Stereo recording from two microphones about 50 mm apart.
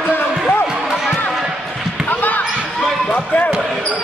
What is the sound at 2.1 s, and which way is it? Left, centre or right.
Basketball bounce, left.